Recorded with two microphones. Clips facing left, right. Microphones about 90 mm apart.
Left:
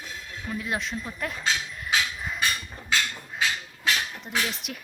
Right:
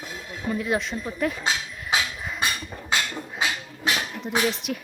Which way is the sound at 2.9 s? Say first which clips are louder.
Right 1 dB; 20° right (ahead or behind).